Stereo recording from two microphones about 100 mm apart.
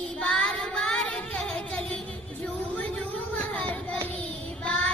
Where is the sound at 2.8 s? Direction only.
15° left (ahead or behind).